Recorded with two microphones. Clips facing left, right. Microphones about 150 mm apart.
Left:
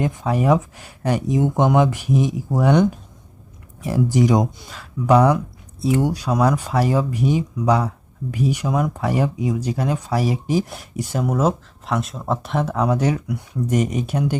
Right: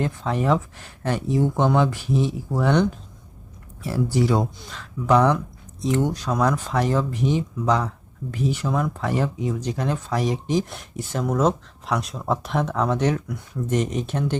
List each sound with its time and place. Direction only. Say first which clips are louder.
0.0 s speech: left 3 dB; 15° left (ahead or behind)
3.8 s speech: left 4 dB; 15° left (ahead or behind)